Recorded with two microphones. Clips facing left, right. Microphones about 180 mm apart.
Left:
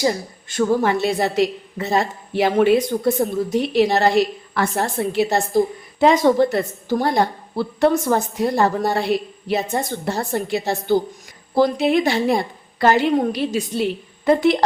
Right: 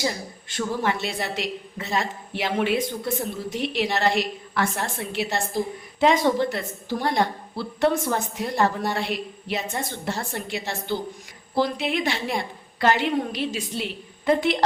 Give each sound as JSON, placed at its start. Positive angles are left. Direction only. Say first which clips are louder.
{"t": 0.0, "sound": "a woman's voice", "louder": "left 7 dB", "side_deg": 45}